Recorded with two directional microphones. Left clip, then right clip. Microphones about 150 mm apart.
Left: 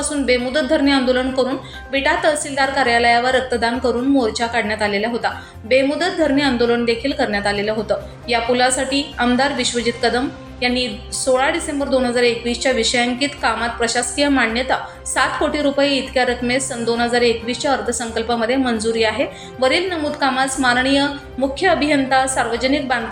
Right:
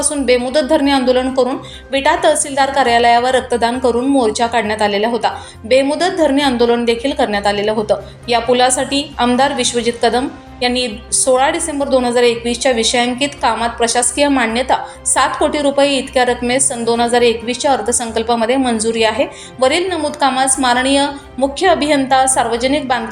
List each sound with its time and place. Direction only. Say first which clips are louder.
0.3 s a woman's voice: right 4 dB; 30° right (ahead or behind)